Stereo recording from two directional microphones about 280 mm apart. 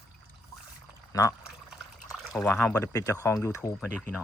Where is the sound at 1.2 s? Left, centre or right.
Centre.